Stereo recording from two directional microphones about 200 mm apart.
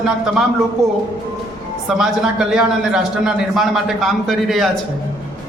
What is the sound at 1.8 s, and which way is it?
A man's voice, centre (ahead or behind).